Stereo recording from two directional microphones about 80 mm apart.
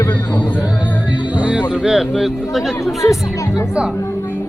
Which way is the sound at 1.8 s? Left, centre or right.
Centre.